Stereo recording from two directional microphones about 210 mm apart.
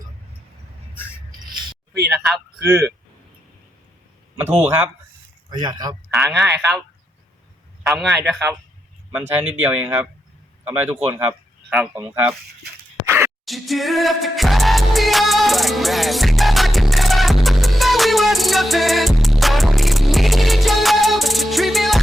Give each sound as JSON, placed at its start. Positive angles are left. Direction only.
{"t": 2.0, "sound": "speech", "side_deg": 0}
{"t": 4.4, "sound": "speech", "side_deg": -30}
{"t": 5.5, "sound": "speech", "side_deg": -20}
{"t": 6.1, "sound": "speech", "side_deg": 0}
{"t": 7.9, "sound": "speech", "side_deg": 0}
{"t": 13.1, "sound": "a sound", "side_deg": -10}
{"t": 13.4, "sound": "music", "side_deg": 0}